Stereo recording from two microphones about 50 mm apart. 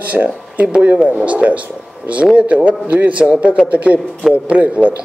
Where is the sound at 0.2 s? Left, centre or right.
Centre.